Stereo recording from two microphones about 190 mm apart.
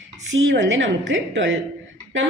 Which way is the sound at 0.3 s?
75° right (ahead or behind).